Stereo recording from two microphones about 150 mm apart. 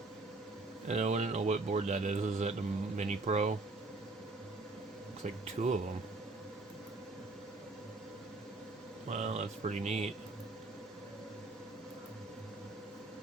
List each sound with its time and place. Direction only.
0.9 s a man's voice: 50° right (ahead or behind)
5.2 s a man's voice: 50° right (ahead or behind)
9.0 s a man's voice: 50° right (ahead or behind)